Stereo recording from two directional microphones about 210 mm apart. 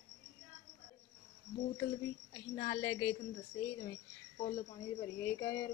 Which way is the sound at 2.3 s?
25° left (ahead or behind).